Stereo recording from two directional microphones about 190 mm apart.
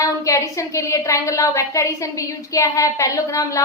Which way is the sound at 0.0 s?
15° left (ahead or behind).